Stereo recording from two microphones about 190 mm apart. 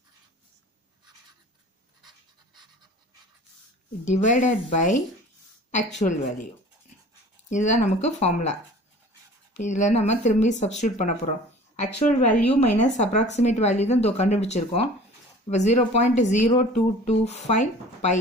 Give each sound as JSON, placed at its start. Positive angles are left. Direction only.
{"t": 4.0, "sound": "speech", "side_deg": 40}
{"t": 7.4, "sound": "speech", "side_deg": 40}
{"t": 9.6, "sound": "speech", "side_deg": 40}
{"t": 12.7, "sound": "speech", "side_deg": 40}